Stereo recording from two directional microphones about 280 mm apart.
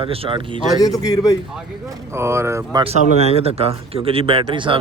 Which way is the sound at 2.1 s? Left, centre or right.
Centre.